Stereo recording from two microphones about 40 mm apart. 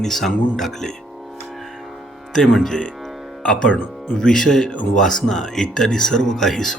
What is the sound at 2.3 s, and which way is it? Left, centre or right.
Speech, centre.